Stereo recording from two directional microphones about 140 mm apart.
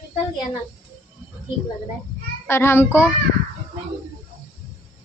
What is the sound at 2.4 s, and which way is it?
Speech, 15° left (ahead or behind).